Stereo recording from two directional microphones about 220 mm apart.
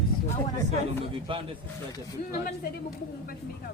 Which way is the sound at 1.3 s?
25° right (ahead or behind).